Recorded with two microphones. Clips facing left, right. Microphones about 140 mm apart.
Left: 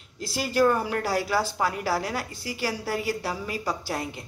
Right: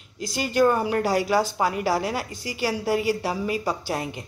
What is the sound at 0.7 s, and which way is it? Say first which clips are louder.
A woman's voice: right 3 dB; 15° right (ahead or behind).